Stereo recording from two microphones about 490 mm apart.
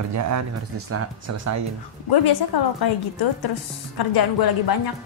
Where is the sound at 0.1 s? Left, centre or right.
Right.